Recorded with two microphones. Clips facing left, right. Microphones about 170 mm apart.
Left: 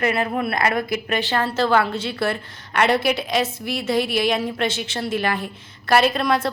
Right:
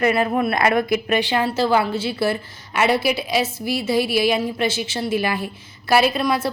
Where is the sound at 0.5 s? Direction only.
20° right (ahead or behind).